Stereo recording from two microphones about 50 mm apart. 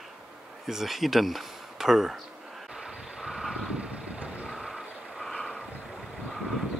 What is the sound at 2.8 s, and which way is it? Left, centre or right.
Vehicle, centre.